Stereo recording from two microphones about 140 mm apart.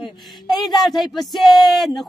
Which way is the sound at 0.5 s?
Centre (ahead or behind).